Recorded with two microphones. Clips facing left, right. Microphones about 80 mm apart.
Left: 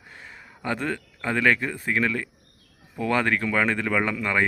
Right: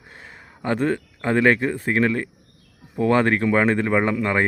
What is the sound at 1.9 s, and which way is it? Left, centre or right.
Speech, right.